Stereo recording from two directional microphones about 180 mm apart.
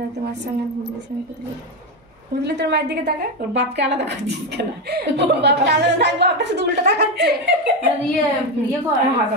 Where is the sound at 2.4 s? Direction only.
70° right (ahead or behind).